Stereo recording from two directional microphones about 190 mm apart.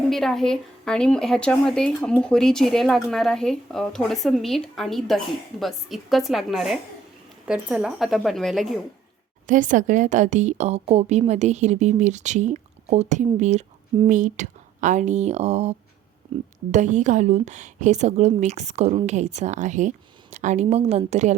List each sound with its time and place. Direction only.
0.1 s speech: centre (ahead or behind)
9.5 s a woman's voice: 40° right (ahead or behind)
16.2 s music: 25° right (ahead or behind)
16.7 s a woman's voice: 40° right (ahead or behind)